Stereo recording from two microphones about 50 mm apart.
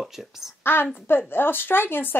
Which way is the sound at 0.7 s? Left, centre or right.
Left.